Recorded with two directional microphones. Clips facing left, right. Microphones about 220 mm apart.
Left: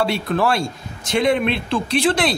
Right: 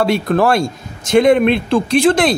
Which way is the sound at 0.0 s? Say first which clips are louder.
Right 5 dB; 45° right (ahead or behind).